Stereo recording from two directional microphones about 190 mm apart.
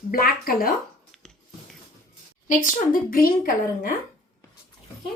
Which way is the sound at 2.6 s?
50° left (ahead or behind).